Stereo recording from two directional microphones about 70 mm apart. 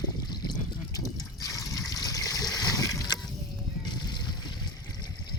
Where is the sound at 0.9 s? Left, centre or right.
Left.